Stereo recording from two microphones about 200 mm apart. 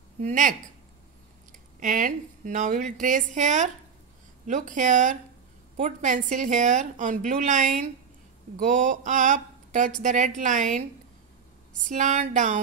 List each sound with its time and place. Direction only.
0.2 s a woman's voice: 40° right (ahead or behind)
1.8 s a woman's voice: 40° right (ahead or behind)
11.9 s a woman's voice: 40° right (ahead or behind)